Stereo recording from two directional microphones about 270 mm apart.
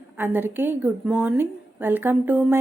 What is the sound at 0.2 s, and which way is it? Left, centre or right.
A woman's voice, centre.